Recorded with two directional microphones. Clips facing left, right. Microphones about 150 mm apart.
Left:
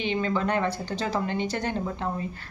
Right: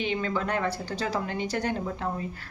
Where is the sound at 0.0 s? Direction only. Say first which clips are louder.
Left 2 dB; centre (ahead or behind).